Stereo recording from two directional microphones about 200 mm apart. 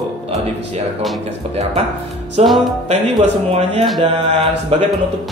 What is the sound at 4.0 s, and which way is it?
Speech, 30° right (ahead or behind).